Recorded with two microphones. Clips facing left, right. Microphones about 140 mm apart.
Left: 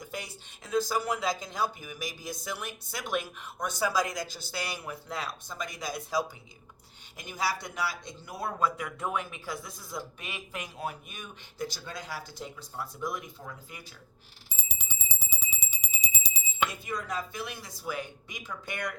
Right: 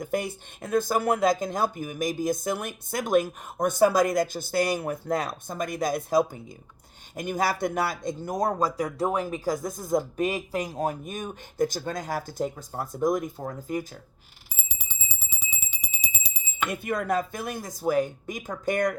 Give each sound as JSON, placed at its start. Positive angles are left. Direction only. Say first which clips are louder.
{"t": 0.0, "sound": "speech", "louder": "right 12 dB", "side_deg": -50}
{"t": 14.5, "sound": "bicycle bell", "louder": "even", "side_deg": -5}
{"t": 16.6, "sound": "speech", "louder": "right 9 dB", "side_deg": -55}